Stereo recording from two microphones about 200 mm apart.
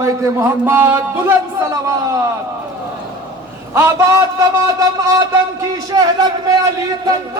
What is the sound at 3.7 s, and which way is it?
A man's voice, 15° right (ahead or behind).